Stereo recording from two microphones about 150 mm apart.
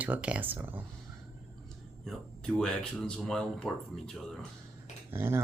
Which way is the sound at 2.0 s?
5° left (ahead or behind).